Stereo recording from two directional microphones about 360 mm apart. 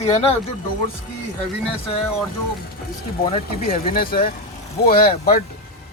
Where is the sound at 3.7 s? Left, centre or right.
Left.